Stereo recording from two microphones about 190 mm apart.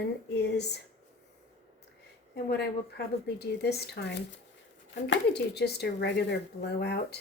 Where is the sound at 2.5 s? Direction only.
60° left (ahead or behind).